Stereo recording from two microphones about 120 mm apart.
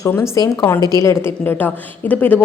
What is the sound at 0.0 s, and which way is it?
A woman's voice, 30° left (ahead or behind).